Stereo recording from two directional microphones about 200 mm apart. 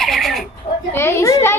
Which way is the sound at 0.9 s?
10° left (ahead or behind).